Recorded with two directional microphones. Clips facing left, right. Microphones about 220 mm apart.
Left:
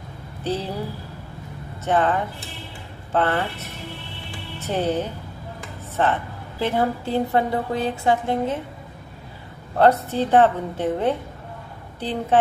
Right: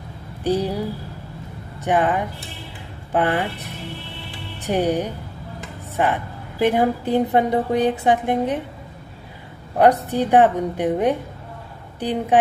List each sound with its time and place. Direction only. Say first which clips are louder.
0.4 s speech: right 5 dB; 15° right (ahead or behind)
1.9 s a woman's voice: right 1 dB; 15° right (ahead or behind)
10.0 s a woman's voice: right 2 dB; 15° right (ahead or behind)